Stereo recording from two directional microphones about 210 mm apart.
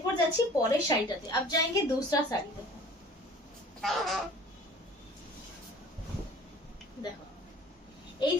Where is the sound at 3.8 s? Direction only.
Centre (ahead or behind).